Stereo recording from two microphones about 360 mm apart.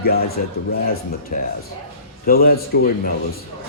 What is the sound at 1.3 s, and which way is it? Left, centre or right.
A man's voice, left.